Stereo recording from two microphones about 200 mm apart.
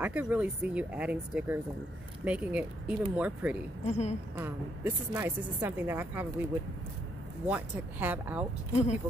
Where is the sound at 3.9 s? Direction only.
35° left (ahead or behind).